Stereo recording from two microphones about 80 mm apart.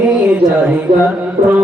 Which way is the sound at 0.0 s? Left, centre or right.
Centre.